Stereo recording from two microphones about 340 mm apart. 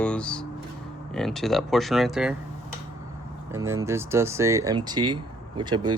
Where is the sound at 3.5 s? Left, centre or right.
Centre.